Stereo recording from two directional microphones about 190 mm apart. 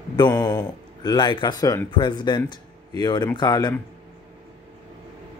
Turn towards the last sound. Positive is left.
turn(degrees=20)  # may be behind; listen again after turning